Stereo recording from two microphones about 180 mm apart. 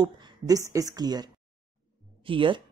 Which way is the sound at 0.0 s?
20° right (ahead or behind).